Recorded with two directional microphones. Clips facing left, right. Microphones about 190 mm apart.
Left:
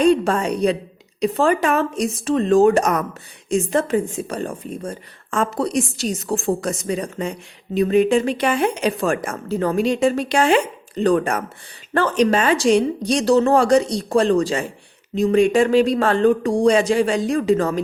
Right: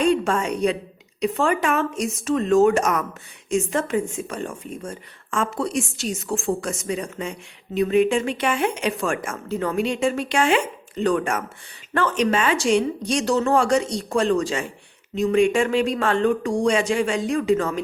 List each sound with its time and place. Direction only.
0.0 s a woman's voice: 35° left (ahead or behind)